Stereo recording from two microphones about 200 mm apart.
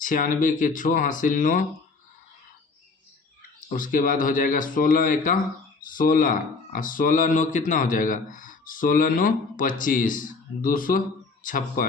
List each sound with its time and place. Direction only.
0.0 s a man's voice: 40° left (ahead or behind)
3.7 s a man's voice: 40° left (ahead or behind)